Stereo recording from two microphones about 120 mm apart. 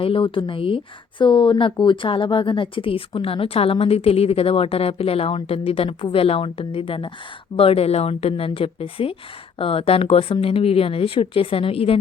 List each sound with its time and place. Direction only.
0.0 s speech: 45° left (ahead or behind)